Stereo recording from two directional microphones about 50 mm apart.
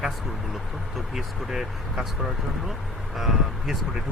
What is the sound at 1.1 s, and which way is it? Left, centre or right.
Speech, centre.